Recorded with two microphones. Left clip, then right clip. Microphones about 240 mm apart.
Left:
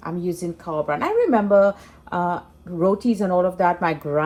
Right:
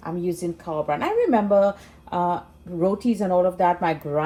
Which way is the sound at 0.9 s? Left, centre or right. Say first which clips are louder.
Left 1 dB; left.